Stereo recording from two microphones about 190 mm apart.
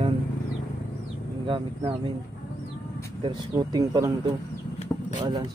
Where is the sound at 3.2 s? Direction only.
25° right (ahead or behind).